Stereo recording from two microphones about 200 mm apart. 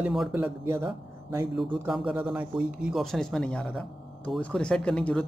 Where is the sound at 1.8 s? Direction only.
5° right (ahead or behind).